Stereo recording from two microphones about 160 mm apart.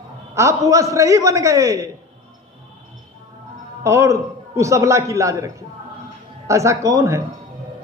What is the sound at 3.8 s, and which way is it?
A man's voice, 20° right (ahead or behind).